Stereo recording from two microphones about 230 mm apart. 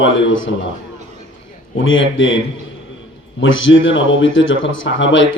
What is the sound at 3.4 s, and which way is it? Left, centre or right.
A man's voice, left.